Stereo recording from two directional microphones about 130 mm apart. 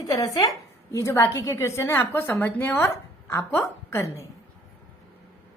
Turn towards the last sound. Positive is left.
turn(degrees=20)  # may be behind; listen again after turning